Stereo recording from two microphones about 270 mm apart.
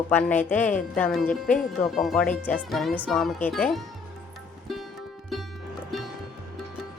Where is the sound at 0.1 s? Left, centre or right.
Centre.